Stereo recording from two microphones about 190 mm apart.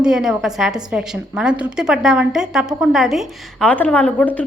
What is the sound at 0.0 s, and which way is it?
A woman's voice, 5° right (ahead or behind).